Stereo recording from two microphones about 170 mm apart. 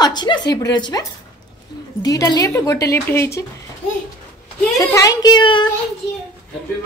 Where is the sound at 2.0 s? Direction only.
25° left (ahead or behind).